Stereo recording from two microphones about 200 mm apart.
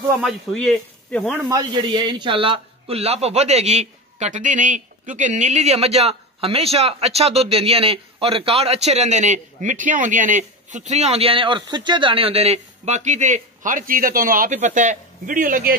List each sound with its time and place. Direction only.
0.2 s speech: centre (ahead or behind)
1.5 s a man's voice: 20° right (ahead or behind); by 15.7 s 45° right (ahead or behind)